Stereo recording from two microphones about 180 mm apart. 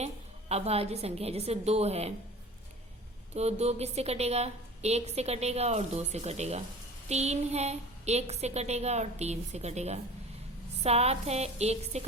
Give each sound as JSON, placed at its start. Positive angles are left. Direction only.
{"t": 0.0, "sound": "a woman's voice", "side_deg": -35}
{"t": 3.3, "sound": "a woman's voice", "side_deg": -35}